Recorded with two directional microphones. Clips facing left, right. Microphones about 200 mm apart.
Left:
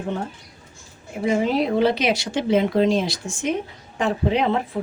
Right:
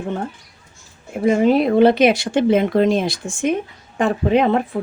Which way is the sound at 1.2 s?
55° right (ahead or behind).